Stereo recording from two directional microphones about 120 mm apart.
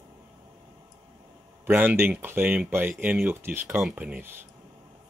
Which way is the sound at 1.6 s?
15° right (ahead or behind).